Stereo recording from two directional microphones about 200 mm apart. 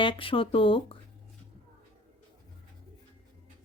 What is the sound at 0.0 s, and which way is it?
Speech, 25° left (ahead or behind).